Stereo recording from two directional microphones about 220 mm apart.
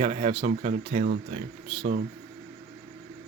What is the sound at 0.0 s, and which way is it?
Speech, 30° right (ahead or behind).